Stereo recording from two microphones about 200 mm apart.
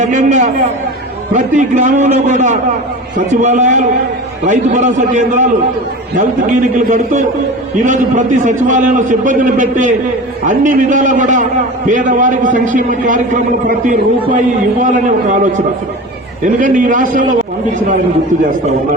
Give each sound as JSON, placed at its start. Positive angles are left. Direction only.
{"t": 0.0, "sound": "a man's voice", "side_deg": -40}
{"t": 16.6, "sound": "a man's voice", "side_deg": -40}